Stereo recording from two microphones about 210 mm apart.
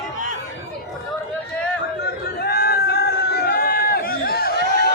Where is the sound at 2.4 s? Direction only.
50° left (ahead or behind).